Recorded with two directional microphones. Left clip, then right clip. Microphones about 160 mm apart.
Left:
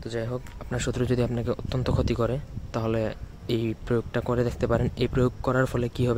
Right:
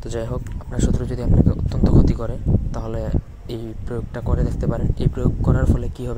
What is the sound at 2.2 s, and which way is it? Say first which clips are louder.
Speech: right 1 dB; 25° left (ahead or behind).